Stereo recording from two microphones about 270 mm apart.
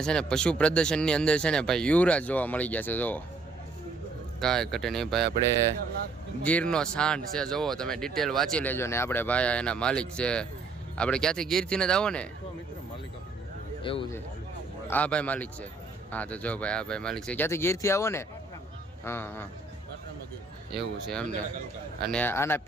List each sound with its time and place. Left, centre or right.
0.0 s speech: centre
4.4 s speech: centre
6.4 s speech: centre
13.8 s speech: centre
14.8 s speech: centre
20.7 s speech: centre